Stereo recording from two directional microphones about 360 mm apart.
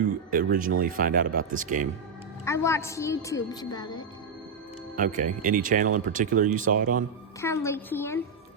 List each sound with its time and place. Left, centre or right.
0.3 s speech: right
2.4 s a woman's voice: centre
4.9 s speech: right
7.4 s a woman's voice: centre